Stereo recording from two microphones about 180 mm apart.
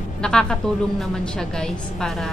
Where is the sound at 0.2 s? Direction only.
5° left (ahead or behind).